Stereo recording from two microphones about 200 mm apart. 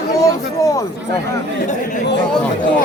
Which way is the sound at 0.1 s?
15° left (ahead or behind).